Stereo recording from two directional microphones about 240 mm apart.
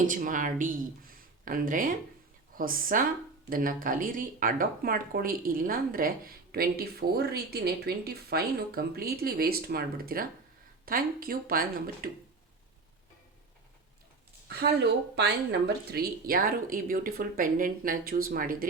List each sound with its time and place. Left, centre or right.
0.1 s speech: right
14.4 s speech: right